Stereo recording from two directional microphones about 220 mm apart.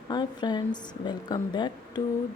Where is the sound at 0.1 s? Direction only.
20° left (ahead or behind).